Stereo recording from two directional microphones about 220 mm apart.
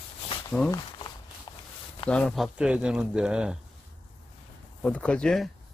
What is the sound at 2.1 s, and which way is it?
Speech, 5° left (ahead or behind).